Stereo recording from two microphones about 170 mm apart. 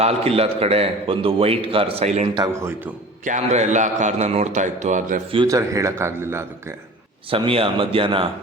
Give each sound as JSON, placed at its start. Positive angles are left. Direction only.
{"t": 0.0, "sound": "a man's voice", "side_deg": -35}
{"t": 2.3, "sound": "a man's voice", "side_deg": -20}
{"t": 3.2, "sound": "a man's voice", "side_deg": -45}
{"t": 5.3, "sound": "a man's voice", "side_deg": -25}
{"t": 7.3, "sound": "a man's voice", "side_deg": -30}